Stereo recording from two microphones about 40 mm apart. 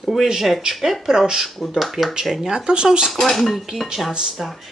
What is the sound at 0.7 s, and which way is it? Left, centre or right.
Cutlery, centre.